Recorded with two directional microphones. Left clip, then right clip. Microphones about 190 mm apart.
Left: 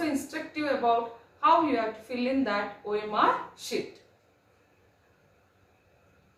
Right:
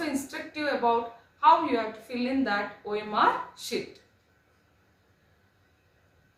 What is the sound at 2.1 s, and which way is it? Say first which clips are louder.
A woman's voice: right 1 dB; 20° right (ahead or behind).